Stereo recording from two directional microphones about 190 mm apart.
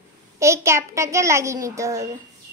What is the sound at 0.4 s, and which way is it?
A child's voice, 15° right (ahead or behind).